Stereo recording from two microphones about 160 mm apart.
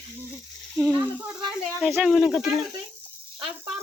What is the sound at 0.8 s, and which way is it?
Speech, 15° right (ahead or behind).